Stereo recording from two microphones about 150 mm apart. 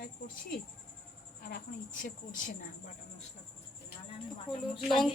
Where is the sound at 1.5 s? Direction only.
65° left (ahead or behind).